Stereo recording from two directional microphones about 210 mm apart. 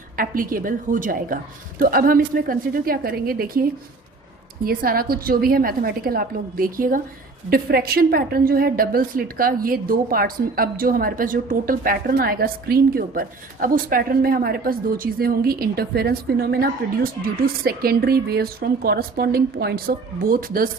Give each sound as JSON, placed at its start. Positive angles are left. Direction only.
{"t": 0.2, "sound": "a woman's voice", "side_deg": -40}